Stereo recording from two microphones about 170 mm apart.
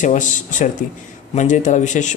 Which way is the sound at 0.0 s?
45° left (ahead or behind).